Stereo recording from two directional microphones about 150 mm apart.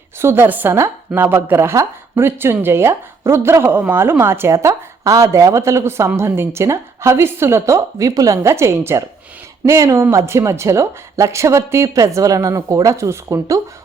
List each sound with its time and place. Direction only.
0.2 s speech: 15° right (ahead or behind)